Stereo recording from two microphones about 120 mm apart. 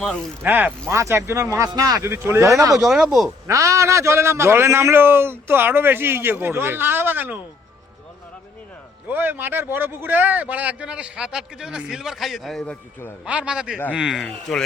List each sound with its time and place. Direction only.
0.4 s a man's voice: 15° right (ahead or behind)
2.8 s speech: 5° right (ahead or behind)
3.4 s a man's voice: 25° right (ahead or behind)
9.0 s a man's voice: 15° right (ahead or behind); by 12.7 s centre (ahead or behind)
13.2 s a man's voice: 10° right (ahead or behind)